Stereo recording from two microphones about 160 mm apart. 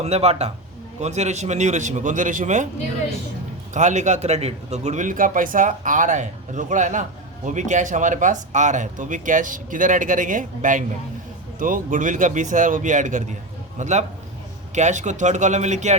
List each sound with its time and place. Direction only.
0.0 s speech: 40° right (ahead or behind)
3.8 s a man's voice: 50° right (ahead or behind)